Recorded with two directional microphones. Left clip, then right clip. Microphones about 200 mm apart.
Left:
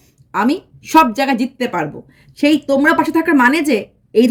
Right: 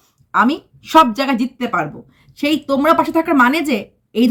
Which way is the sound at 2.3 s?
Centre (ahead or behind).